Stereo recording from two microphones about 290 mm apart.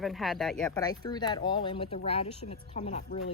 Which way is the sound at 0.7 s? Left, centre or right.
Centre.